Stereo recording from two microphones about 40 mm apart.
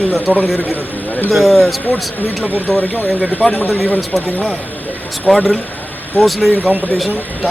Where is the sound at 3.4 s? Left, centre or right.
Left.